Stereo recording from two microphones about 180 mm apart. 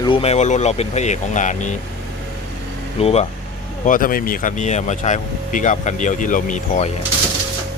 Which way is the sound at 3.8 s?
50° left (ahead or behind).